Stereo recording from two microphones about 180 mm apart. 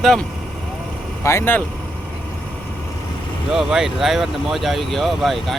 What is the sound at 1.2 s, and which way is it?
Speech, 15° left (ahead or behind).